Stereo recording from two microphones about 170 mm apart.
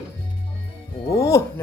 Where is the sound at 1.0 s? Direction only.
20° left (ahead or behind).